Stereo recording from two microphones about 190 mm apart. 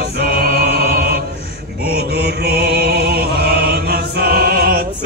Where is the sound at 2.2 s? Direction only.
60° right (ahead or behind).